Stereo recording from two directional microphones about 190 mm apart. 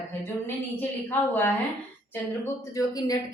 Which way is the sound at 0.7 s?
10° left (ahead or behind).